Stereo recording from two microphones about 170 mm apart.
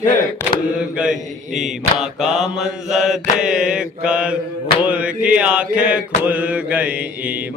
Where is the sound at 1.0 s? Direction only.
5° right (ahead or behind).